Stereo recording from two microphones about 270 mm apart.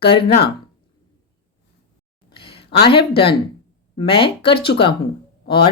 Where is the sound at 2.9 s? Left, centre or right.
Centre.